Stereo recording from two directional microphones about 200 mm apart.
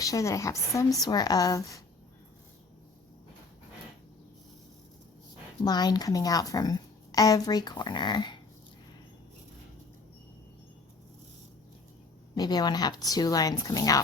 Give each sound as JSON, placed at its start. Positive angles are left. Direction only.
{"t": 0.0, "sound": "a woman's voice", "side_deg": 15}
{"t": 5.6, "sound": "a woman's voice", "side_deg": 20}
{"t": 12.3, "sound": "a woman's voice", "side_deg": 20}